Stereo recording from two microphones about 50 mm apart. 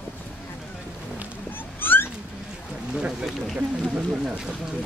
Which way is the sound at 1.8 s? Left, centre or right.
Left.